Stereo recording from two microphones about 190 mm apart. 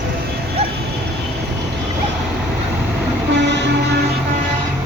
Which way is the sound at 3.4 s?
70° right (ahead or behind).